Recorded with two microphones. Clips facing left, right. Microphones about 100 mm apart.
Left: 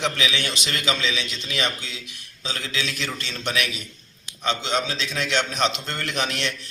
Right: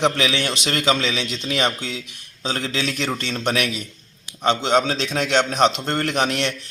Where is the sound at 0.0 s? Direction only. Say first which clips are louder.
Right 5 dB; 50° right (ahead or behind).